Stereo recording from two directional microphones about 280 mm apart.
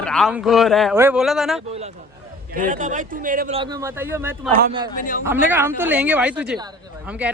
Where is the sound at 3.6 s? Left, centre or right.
Centre.